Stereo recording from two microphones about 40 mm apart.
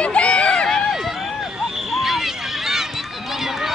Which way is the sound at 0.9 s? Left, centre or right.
Centre.